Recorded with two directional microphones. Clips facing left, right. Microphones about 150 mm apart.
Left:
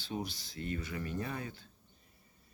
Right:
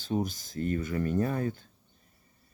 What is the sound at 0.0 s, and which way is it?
Speech, 45° right (ahead or behind).